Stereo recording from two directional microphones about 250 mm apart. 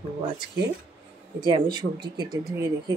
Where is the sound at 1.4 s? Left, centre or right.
Centre.